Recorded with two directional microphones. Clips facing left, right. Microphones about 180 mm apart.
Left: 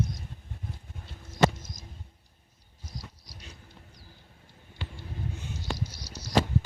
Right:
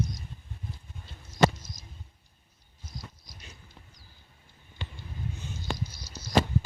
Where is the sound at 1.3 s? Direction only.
50° left (ahead or behind).